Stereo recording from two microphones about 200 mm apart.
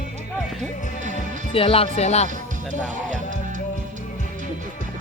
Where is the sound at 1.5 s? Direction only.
30° left (ahead or behind).